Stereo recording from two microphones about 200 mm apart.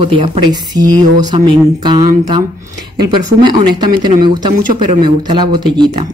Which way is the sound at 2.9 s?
20° right (ahead or behind).